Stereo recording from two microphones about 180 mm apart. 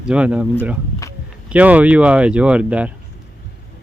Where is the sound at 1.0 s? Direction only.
20° left (ahead or behind).